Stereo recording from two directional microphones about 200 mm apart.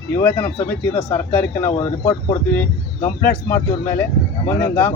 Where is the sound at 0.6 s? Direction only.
25° left (ahead or behind).